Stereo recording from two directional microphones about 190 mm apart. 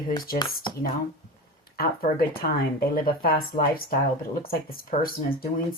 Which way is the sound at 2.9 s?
50° left (ahead or behind).